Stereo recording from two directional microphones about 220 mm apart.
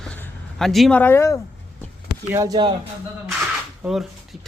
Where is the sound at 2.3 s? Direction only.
15° right (ahead or behind).